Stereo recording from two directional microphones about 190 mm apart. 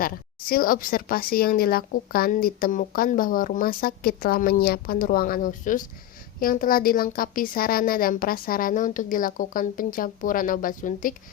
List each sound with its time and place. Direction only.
0.0 s a woman's voice: 50° left (ahead or behind)